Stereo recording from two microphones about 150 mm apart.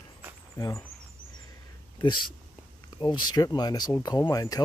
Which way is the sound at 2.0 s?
30° left (ahead or behind).